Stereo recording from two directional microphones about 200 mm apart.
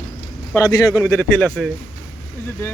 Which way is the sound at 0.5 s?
20° left (ahead or behind).